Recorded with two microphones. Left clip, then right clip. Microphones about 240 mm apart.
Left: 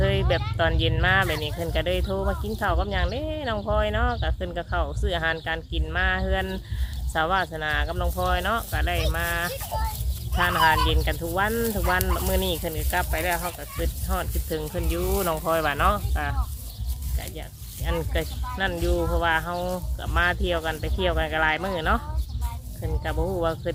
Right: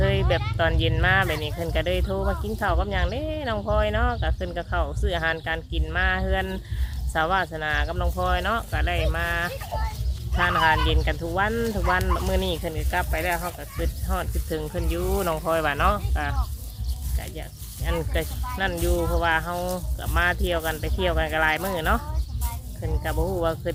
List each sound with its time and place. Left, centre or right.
0.0 s a sound: centre
0.5 s speech: centre
9.5 s chicken: left
10.3 s speech: centre
17.8 s speech: centre